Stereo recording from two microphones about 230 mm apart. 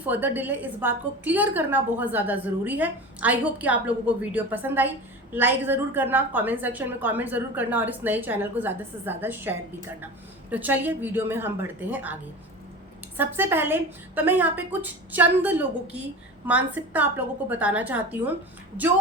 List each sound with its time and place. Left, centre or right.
0.0 s a woman's voice: centre
13.1 s a woman's voice: centre